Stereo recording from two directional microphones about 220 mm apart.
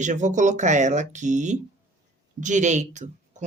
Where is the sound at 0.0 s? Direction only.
35° right (ahead or behind).